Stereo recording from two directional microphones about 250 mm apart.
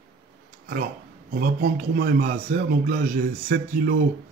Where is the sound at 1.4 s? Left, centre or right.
Right.